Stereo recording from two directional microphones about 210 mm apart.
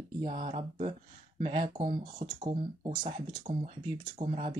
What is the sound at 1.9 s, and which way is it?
Speech, 40° right (ahead or behind).